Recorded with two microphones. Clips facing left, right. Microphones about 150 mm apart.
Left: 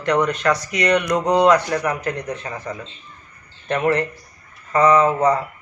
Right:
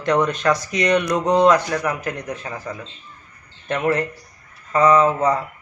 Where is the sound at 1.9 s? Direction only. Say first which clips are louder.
Left 1 dB; 10° right (ahead or behind).